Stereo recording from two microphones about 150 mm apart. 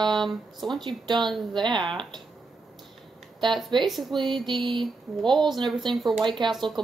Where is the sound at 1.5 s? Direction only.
30° right (ahead or behind).